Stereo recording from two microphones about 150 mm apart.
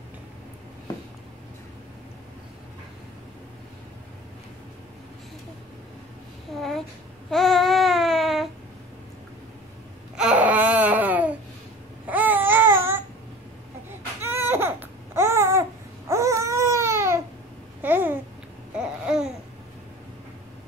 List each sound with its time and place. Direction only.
7.2 s babbling: centre (ahead or behind)
10.1 s babbling: 10° right (ahead or behind)
14.2 s baby cry: 15° right (ahead or behind)
17.8 s babbling: 15° right (ahead or behind)